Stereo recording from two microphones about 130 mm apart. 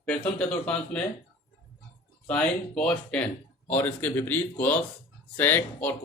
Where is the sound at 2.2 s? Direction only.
5° left (ahead or behind).